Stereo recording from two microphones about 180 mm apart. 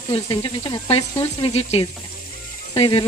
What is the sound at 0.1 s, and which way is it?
Speech, 30° left (ahead or behind).